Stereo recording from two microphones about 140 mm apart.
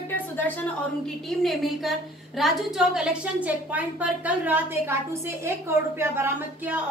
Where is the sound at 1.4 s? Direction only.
Centre (ahead or behind); by 6.8 s 15° right (ahead or behind).